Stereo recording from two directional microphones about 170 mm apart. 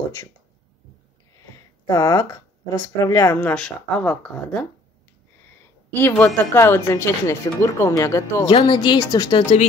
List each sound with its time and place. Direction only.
1.9 s speech: 20° left (ahead or behind); by 4.6 s 5° left (ahead or behind)
5.9 s a woman's voice: 10° left (ahead or behind)